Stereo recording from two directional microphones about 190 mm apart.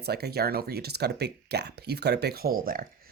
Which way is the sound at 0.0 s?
55° right (ahead or behind).